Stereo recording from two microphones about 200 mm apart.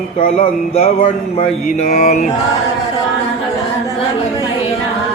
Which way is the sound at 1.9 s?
40° left (ahead or behind).